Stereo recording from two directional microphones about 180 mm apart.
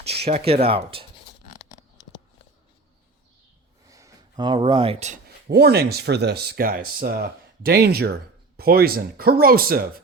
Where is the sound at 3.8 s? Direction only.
20° right (ahead or behind); by 5.2 s 35° right (ahead or behind).